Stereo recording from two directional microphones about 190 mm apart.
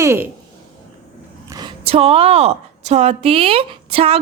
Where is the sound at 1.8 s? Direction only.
30° right (ahead or behind).